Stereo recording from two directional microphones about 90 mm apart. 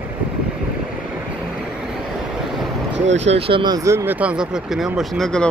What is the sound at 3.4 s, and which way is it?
Speech, 75° right (ahead or behind).